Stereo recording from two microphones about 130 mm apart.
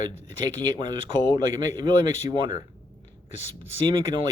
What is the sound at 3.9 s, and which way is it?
Speech, 35° right (ahead or behind).